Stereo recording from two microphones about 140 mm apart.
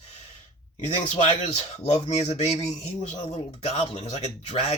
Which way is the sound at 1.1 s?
55° left (ahead or behind).